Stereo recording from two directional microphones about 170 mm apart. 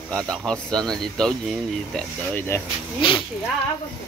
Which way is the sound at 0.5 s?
5° left (ahead or behind).